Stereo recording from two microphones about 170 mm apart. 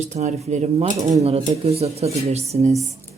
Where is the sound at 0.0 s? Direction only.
45° right (ahead or behind).